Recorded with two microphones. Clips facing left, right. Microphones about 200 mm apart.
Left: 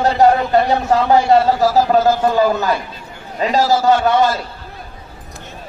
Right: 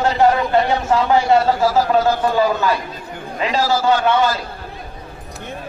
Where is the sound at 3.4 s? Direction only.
40° left (ahead or behind).